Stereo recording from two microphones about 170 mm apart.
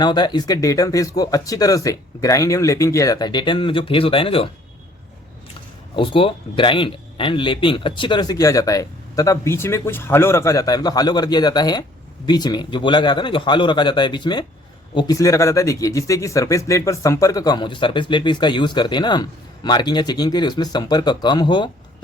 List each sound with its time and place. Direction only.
0.0 s speech: 25° left (ahead or behind)
6.0 s speech: 30° left (ahead or behind)